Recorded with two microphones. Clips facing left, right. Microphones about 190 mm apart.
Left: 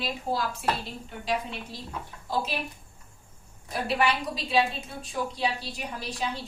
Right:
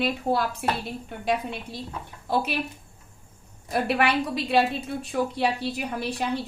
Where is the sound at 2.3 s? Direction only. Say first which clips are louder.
Right 4 dB; 60° right (ahead or behind).